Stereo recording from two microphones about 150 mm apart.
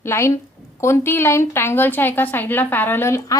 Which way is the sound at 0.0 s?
15° left (ahead or behind).